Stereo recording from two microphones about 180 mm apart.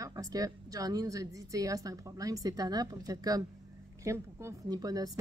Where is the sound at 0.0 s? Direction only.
20° right (ahead or behind).